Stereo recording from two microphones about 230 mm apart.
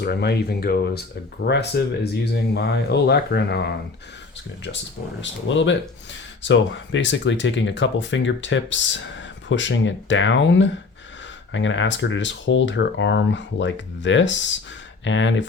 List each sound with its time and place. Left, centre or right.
0.0 s speech: left
5.2 s speech: left